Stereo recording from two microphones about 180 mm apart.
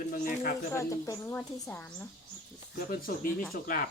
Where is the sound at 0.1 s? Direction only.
50° left (ahead or behind).